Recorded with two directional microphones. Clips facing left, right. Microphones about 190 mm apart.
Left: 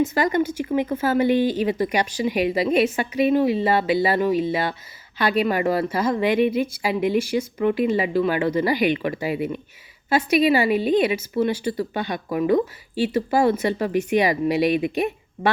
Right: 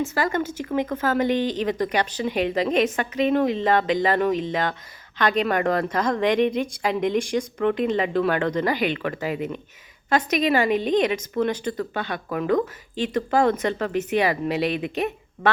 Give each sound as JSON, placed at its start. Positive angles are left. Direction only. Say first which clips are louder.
{"t": 0.0, "sound": "speech", "louder": "left 4 dB", "side_deg": 15}